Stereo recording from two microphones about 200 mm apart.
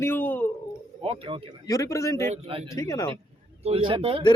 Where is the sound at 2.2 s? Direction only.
30° right (ahead or behind).